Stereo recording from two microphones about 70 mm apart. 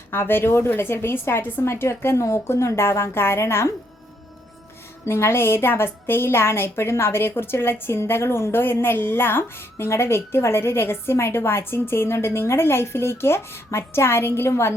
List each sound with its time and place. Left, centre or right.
0.1 s a woman's voice: left
5.0 s a woman's voice: left